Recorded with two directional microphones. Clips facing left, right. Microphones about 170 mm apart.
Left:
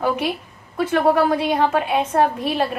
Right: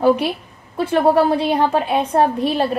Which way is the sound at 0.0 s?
30° right (ahead or behind).